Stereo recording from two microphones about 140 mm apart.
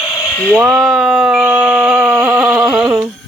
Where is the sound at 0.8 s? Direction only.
Centre (ahead or behind).